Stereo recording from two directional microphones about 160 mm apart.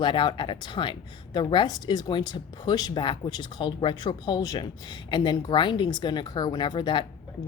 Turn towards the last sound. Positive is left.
turn(degrees=30)  # may be behind; listen again after turning